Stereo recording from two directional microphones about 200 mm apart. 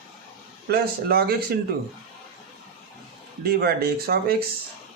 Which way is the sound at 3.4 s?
50° right (ahead or behind).